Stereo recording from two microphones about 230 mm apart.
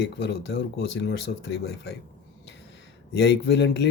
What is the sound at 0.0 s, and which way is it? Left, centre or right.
Speech, left.